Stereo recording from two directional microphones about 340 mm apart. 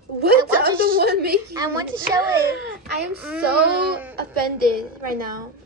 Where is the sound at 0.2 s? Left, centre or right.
Right.